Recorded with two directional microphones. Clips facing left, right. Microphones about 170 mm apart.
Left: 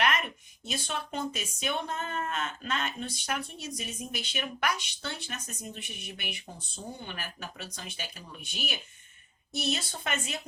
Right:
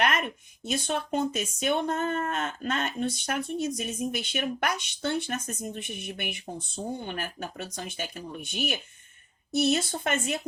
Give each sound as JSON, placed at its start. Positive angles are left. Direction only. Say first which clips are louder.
{"t": 0.0, "sound": "speech", "louder": "right 2 dB", "side_deg": -50}